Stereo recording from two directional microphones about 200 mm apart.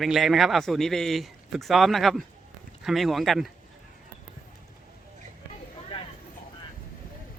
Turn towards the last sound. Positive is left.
turn(degrees=25)  # may be behind; listen again after turning